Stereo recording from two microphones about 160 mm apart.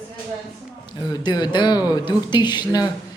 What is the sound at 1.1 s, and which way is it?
Speech, 25° left (ahead or behind).